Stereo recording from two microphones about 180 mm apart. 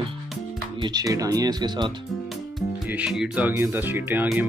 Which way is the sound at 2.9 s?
5° right (ahead or behind).